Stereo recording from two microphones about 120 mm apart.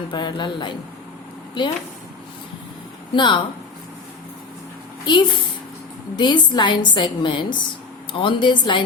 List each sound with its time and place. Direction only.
0.1 s a woman's voice: 40° left (ahead or behind)
3.2 s a woman's voice: 40° left (ahead or behind)
5.1 s a woman's voice: 35° left (ahead or behind)